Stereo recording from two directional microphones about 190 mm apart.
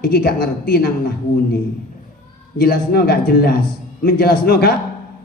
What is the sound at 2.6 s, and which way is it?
A woman's voice, 55° left (ahead or behind).